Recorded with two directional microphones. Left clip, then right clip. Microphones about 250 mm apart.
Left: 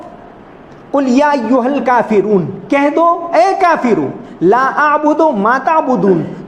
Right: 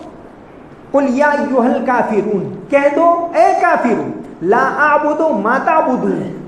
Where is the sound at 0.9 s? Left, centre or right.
Left.